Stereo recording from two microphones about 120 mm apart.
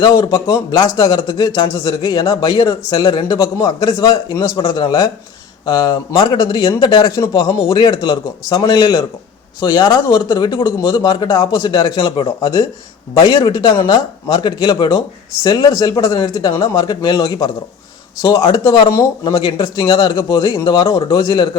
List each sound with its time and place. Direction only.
0.0 s a man's voice: 35° left (ahead or behind)